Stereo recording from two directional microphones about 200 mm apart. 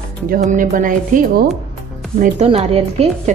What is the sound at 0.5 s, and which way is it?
A woman's voice, 40° right (ahead or behind).